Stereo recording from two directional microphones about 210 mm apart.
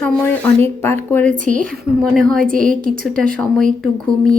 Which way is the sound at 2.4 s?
40° right (ahead or behind).